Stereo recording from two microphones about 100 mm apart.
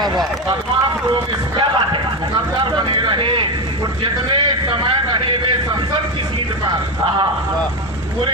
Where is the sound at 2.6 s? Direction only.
50° right (ahead or behind).